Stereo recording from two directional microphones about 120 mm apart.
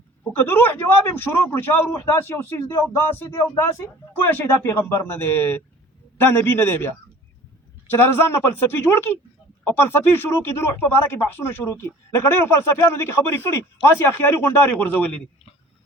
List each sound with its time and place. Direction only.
0.3 s speech: 20° left (ahead or behind)